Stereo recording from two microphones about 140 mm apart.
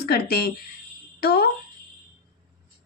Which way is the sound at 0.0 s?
90° left.